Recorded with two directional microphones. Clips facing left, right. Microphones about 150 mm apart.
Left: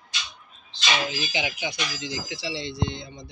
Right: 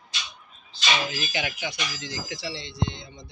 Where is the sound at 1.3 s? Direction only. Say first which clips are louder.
Left 1 dB; 15° left (ahead or behind).